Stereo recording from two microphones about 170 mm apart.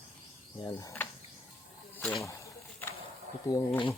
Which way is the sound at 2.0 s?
5° left (ahead or behind).